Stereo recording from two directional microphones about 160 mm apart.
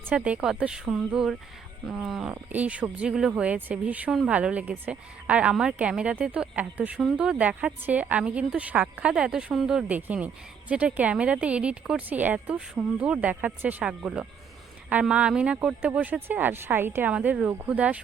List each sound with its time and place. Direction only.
0.1 s a woman's voice: 10° right (ahead or behind)